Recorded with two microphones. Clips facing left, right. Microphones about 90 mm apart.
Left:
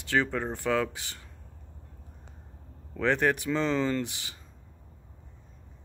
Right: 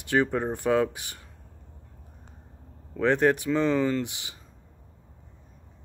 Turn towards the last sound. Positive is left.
turn(degrees=-20)  # may be behind; listen again after turning